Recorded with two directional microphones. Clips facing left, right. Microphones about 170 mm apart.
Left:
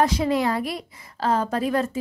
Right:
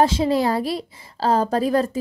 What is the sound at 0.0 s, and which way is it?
A woman's voice, 30° right (ahead or behind).